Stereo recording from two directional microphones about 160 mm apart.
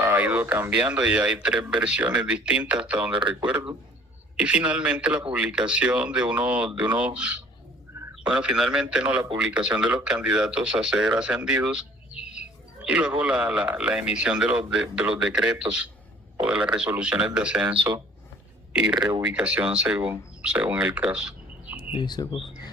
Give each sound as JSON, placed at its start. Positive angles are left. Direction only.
{"t": 0.0, "sound": "speech", "side_deg": -10}
{"t": 4.4, "sound": "speech", "side_deg": -5}
{"t": 18.9, "sound": "speech", "side_deg": -25}
{"t": 19.2, "sound": "speech", "side_deg": -5}
{"t": 21.8, "sound": "speech", "side_deg": 30}